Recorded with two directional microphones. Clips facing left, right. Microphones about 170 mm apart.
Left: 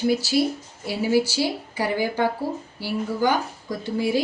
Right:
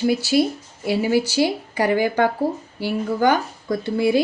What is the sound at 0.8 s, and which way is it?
Speech, 60° right (ahead or behind).